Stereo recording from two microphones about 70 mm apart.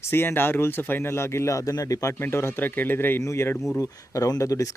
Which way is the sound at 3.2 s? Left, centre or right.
Left.